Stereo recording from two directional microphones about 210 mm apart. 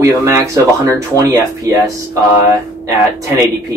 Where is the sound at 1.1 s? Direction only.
10° left (ahead or behind).